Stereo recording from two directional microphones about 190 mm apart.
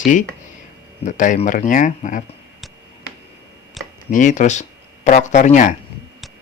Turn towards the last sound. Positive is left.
turn(degrees=40)  # may be behind; listen again after turning